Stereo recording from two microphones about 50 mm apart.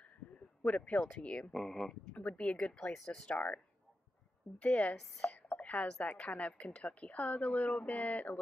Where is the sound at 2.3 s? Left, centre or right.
Left.